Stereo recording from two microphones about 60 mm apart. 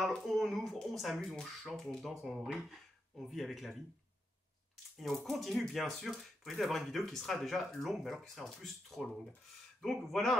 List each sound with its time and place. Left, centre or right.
0.0 s speech: centre
4.9 s speech: centre